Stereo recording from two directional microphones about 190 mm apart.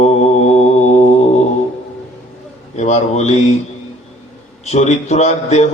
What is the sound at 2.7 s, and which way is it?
Mantra, 35° left (ahead or behind).